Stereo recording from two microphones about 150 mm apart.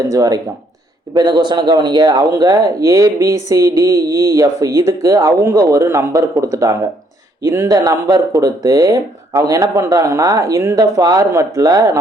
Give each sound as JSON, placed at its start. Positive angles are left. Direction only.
{"t": 0.1, "sound": "speech", "side_deg": -25}